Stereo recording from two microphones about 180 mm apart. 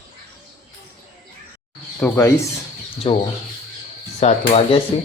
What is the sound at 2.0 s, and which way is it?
Speech, 15° left (ahead or behind).